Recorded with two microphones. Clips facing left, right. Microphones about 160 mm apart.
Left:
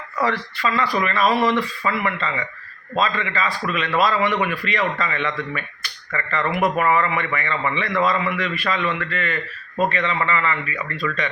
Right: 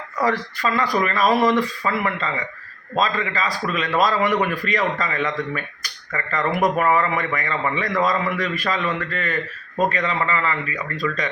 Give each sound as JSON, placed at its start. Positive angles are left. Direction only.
{"t": 0.2, "sound": "a man's voice", "side_deg": -40}
{"t": 6.5, "sound": "speech", "side_deg": 0}
{"t": 6.9, "sound": "a man's voice", "side_deg": -40}